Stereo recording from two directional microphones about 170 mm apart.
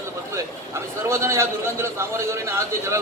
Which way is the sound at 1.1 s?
15° right (ahead or behind).